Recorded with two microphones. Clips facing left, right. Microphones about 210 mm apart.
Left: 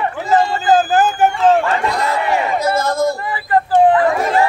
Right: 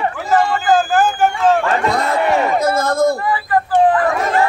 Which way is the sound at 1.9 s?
55° right (ahead or behind).